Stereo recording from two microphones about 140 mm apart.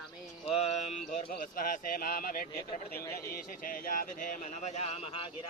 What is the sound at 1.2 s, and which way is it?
Speech, 80° left.